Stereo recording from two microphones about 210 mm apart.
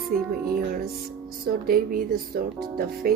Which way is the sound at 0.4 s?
45° right (ahead or behind).